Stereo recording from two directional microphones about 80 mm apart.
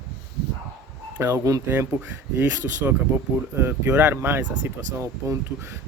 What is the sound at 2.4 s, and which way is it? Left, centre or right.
Speech, right.